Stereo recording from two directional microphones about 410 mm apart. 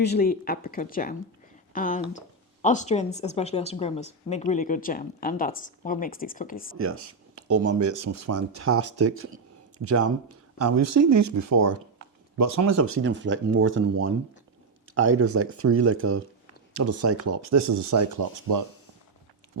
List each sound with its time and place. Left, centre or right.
0.0 s speech: left
7.4 s speech: right